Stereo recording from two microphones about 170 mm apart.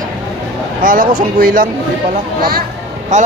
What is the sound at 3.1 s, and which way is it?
Speech, 45° right (ahead or behind).